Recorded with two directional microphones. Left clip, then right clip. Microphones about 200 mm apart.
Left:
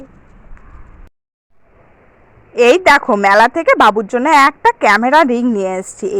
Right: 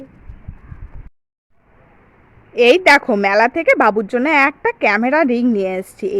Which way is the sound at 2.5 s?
Centre (ahead or behind).